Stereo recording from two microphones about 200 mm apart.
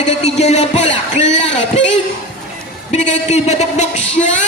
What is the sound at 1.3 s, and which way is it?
Speech, 65° left (ahead or behind).